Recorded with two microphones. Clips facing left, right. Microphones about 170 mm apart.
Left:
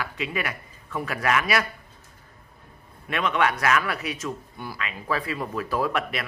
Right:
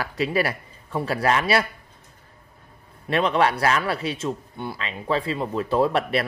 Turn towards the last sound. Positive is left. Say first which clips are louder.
# right 5 dB
turn(degrees=-30)  # may be behind; listen again after turning